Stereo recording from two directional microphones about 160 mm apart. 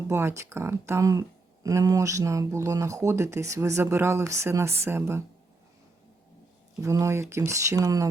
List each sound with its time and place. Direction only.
0.1 s speech: 15° right (ahead or behind)
6.8 s speech: 20° right (ahead or behind)